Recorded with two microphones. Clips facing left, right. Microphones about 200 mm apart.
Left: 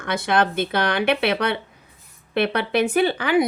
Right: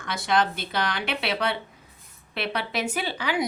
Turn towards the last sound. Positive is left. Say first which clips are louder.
# left 9 dB
turn(degrees=55)  # may be behind; listen again after turning